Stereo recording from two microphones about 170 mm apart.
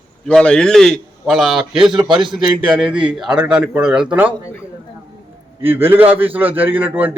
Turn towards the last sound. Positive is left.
turn(degrees=-10)  # may be behind; listen again after turning